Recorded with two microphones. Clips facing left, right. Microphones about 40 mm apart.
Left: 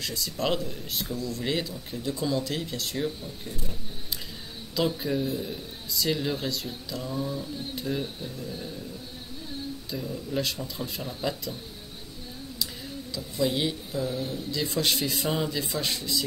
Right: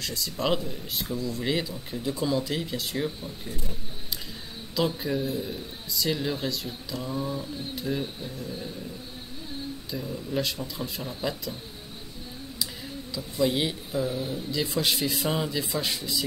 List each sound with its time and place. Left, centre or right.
0.0 s a man's voice: centre
4.7 s a man's voice: centre
9.8 s a man's voice: centre
12.5 s speech: centre